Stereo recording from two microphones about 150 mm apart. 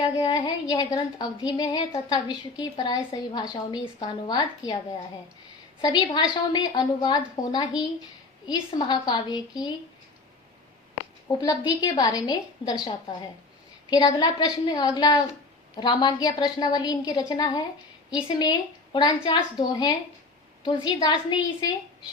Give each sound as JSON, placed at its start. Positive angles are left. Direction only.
{"t": 0.2, "sound": "a woman's voice", "side_deg": 25}
{"t": 11.3, "sound": "a woman's voice", "side_deg": 25}
{"t": 13.9, "sound": "a woman's voice", "side_deg": 25}